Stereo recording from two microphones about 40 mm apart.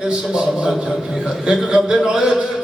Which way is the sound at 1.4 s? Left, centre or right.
Centre.